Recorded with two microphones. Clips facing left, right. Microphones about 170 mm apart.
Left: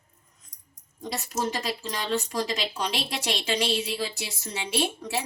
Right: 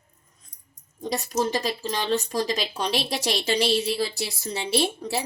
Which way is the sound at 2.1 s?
40° right (ahead or behind).